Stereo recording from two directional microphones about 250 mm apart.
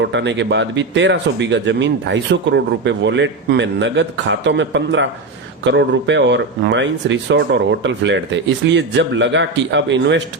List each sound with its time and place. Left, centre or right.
0.0 s speech: right